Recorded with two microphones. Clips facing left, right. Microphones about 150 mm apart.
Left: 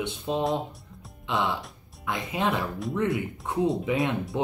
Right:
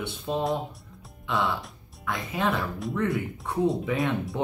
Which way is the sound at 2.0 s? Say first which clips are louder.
Even; 20° left (ahead or behind).